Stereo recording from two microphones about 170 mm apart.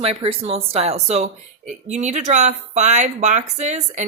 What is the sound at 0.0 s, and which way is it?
A woman's voice, 35° right (ahead or behind).